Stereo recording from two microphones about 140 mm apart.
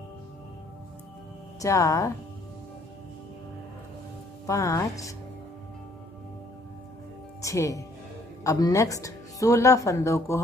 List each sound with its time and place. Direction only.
1.6 s speech: 20° left (ahead or behind)
4.5 s speech: 20° left (ahead or behind)
7.4 s speech: 25° left (ahead or behind)